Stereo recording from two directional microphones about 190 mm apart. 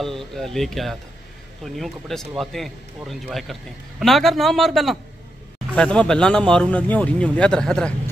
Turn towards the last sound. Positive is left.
turn(degrees=5)  # may be behind; listen again after turning